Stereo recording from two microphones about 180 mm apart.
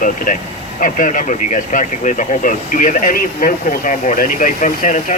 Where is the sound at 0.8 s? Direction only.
45° left (ahead or behind).